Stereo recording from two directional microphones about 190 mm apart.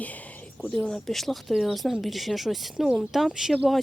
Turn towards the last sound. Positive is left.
turn(degrees=0)  # may be behind; listen again after turning